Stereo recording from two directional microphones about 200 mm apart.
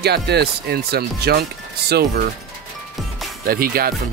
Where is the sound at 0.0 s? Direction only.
55° right (ahead or behind).